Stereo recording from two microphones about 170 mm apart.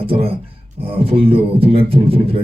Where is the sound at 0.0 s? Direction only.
35° right (ahead or behind).